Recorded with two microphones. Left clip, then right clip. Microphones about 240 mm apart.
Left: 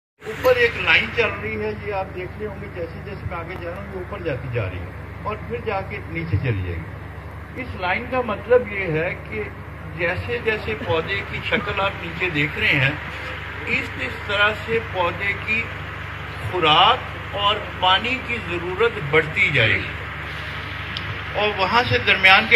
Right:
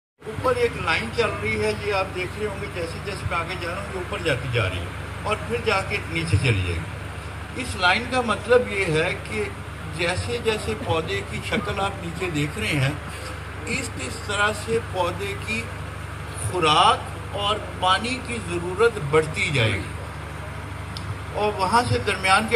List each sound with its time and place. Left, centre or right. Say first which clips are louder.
0.8 s speech: left 5 dB; right
4.2 s speech: right 3 dB; right
7.8 s speech: right 2 dB; right
21.4 s speech: left 2 dB; right